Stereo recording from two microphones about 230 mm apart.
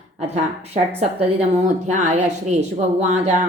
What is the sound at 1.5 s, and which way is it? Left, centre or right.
Speech, right.